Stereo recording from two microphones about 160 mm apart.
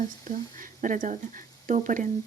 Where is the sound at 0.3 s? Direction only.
60° right (ahead or behind).